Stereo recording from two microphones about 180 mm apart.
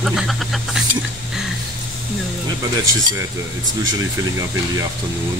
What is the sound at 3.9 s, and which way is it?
Speech, 20° right (ahead or behind).